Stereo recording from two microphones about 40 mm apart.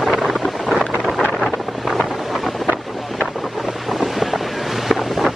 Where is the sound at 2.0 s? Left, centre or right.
Centre.